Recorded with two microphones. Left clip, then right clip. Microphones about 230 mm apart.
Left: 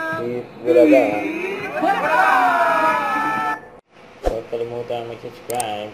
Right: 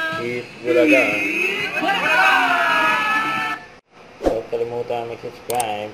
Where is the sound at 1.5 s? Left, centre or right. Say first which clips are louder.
Even; centre.